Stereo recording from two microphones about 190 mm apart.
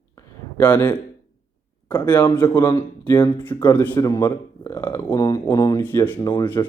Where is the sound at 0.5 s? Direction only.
10° left (ahead or behind).